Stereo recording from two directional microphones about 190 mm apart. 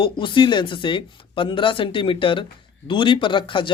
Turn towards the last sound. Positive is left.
turn(degrees=25)  # may be behind; listen again after turning